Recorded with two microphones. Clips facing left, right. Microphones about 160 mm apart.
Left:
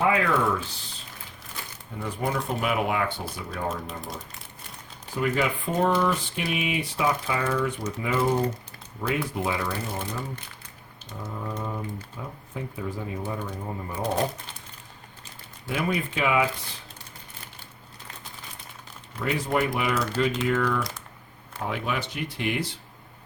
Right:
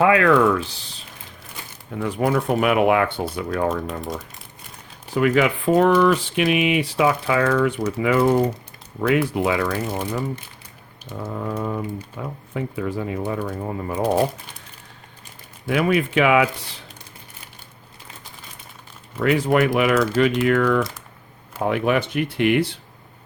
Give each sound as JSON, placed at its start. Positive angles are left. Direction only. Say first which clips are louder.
{"t": 0.0, "sound": "speech", "louder": "right 7 dB", "side_deg": -70}
{"t": 2.0, "sound": "speech", "louder": "right 8 dB", "side_deg": -75}
{"t": 5.1, "sound": "speech", "louder": "right 7 dB", "side_deg": -80}
{"t": 9.0, "sound": "speech", "louder": "right 8 dB", "side_deg": -70}
{"t": 11.2, "sound": "speech", "louder": "right 7 dB", "side_deg": -60}
{"t": 15.6, "sound": "speech", "louder": "right 8 dB", "side_deg": -70}
{"t": 19.2, "sound": "speech", "louder": "right 8 dB", "side_deg": -75}